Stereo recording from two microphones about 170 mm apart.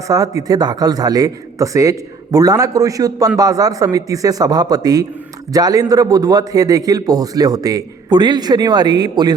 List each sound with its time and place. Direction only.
0.1 s a man's voice: 20° right (ahead or behind)